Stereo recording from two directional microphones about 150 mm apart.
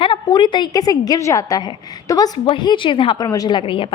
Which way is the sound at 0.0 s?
30° left (ahead or behind).